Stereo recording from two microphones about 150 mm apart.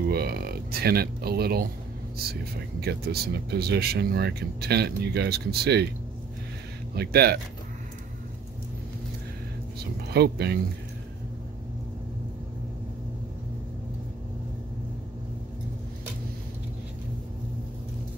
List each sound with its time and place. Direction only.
0.1 s speech: 90° right
2.8 s speech: 90° right
7.0 s speech: 90° right
10.1 s speech: 90° right